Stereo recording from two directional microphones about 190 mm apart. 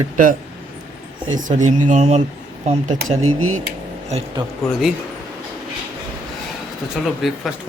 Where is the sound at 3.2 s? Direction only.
90° right.